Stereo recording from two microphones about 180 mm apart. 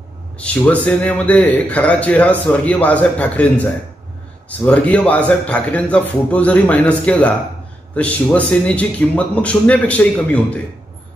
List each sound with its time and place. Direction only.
0.8 s a man's voice: 10° left (ahead or behind)